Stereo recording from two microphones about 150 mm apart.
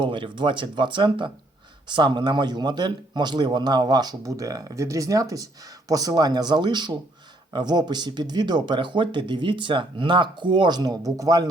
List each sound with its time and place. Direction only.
0.0 s a man's voice: 30° right (ahead or behind)